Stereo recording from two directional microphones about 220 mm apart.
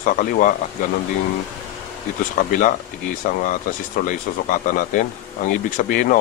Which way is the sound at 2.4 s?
40° left (ahead or behind).